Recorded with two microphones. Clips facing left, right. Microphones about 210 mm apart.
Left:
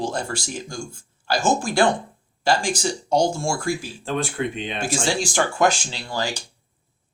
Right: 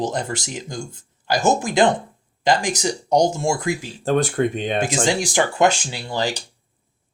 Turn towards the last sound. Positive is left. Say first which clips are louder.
# right 3 dB
turn(degrees=-20)  # may be behind; listen again after turning